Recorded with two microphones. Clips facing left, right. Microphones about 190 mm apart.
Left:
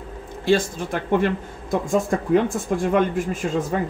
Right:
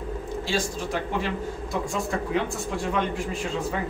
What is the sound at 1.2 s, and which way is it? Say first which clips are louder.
Speech: left 6 dB; 50° left (ahead or behind).